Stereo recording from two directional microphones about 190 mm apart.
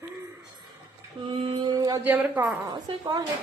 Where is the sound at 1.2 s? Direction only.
25° right (ahead or behind); by 2.5 s 5° right (ahead or behind).